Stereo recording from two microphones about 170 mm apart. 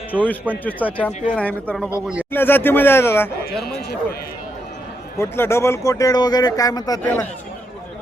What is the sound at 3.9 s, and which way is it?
Speech, 65° left (ahead or behind).